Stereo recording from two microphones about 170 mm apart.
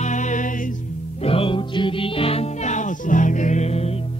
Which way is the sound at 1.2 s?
35° left (ahead or behind).